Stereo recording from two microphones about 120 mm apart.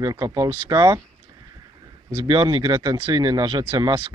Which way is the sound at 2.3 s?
40° right (ahead or behind).